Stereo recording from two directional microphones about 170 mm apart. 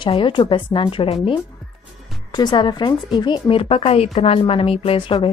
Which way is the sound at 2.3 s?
25° left (ahead or behind).